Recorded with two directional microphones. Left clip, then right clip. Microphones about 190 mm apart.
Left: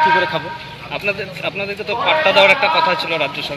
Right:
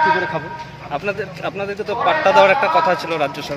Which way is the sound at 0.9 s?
55° right (ahead or behind).